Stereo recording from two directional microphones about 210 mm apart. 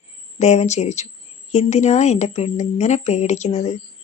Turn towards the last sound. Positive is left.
turn(degrees=30)  # may be behind; listen again after turning